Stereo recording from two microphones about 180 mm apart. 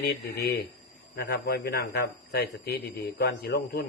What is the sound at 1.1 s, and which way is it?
A man's voice, 60° left (ahead or behind).